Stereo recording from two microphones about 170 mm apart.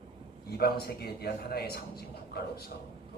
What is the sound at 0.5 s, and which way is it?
A man's voice, 70° left (ahead or behind).